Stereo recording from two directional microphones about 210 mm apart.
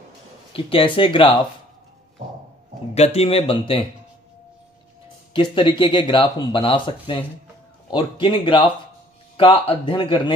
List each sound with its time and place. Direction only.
0.5 s speech: 25° left (ahead or behind)
2.9 s speech: 30° left (ahead or behind)
5.3 s speech: 25° left (ahead or behind)